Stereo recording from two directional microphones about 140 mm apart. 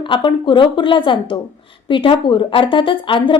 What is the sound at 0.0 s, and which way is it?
A woman's voice, 35° left (ahead or behind).